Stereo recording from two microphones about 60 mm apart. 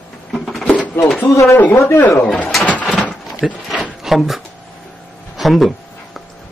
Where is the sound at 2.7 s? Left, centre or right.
Left.